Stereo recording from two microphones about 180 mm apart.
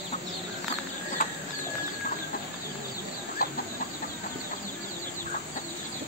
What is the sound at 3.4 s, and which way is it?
Chicken, 55° left (ahead or behind).